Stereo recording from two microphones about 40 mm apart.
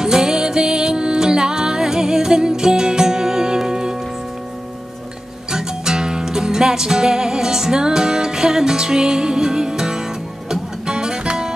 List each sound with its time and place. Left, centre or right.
0.0 s music: centre
5.5 s music: centre